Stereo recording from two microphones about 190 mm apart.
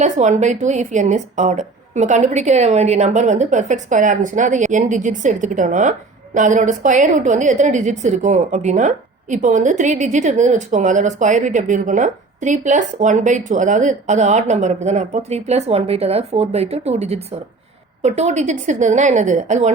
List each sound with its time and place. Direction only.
0.0 s a woman's voice: 40° right (ahead or behind)